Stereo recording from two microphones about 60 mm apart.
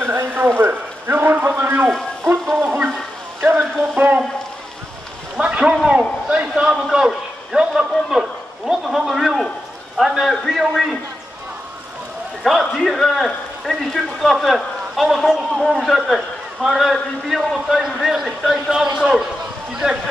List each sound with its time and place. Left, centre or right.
0.0 s a man's voice: right
2.6 s stir: right
3.9 s a sound: right
5.4 s a sound: centre
9.9 s a man's voice: centre
12.4 s a man's voice: centre